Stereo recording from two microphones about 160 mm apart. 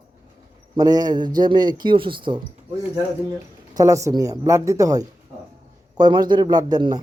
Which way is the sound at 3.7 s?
20° right (ahead or behind).